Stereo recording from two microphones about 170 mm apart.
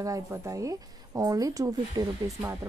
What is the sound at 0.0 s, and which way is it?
Speech, 20° right (ahead or behind).